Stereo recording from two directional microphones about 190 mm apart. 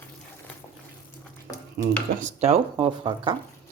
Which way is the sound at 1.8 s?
40° right (ahead or behind).